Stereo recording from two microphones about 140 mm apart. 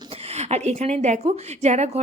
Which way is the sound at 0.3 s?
50° right (ahead or behind).